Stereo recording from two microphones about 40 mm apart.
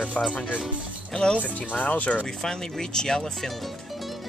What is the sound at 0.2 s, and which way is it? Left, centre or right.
Speech, left.